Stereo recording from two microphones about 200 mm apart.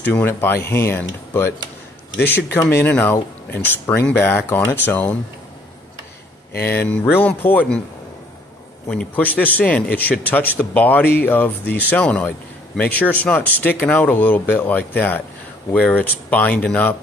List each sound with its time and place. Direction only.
0.1 s speech: 10° left (ahead or behind)
2.1 s speech: 55° left (ahead or behind)
2.5 s speech: 10° left (ahead or behind)
6.6 s speech: 10° left (ahead or behind)
8.8 s speech: 5° left (ahead or behind)